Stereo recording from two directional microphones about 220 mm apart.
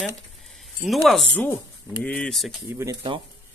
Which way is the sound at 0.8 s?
Centre (ahead or behind).